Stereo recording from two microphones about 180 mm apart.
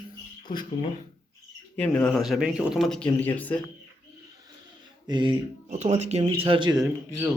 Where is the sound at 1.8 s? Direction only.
10° left (ahead or behind).